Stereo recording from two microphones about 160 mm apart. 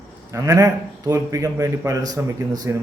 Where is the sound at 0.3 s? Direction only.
20° right (ahead or behind).